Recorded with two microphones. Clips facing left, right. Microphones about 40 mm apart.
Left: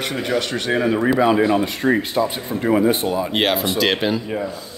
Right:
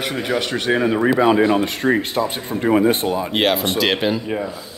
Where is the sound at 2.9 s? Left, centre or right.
Right.